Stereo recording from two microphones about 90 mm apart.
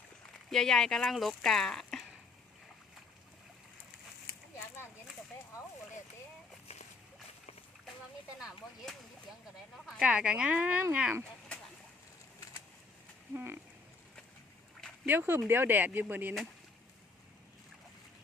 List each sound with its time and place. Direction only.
0.5 s speech: 5° left (ahead or behind)
10.0 s speech: 15° right (ahead or behind)
13.3 s speech: 25° right (ahead or behind)
15.0 s speech: 25° right (ahead or behind)